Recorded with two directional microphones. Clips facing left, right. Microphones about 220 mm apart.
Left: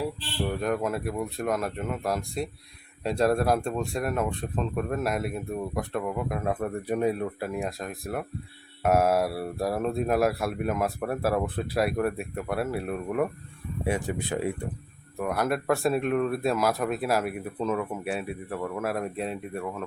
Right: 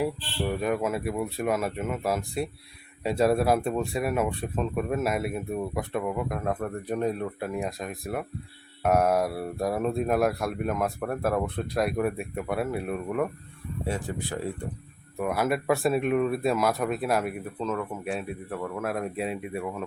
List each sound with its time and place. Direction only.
0.4 s speech: 5° right (ahead or behind)
13.8 s speech: 15° left (ahead or behind)
15.2 s speech: 5° right (ahead or behind)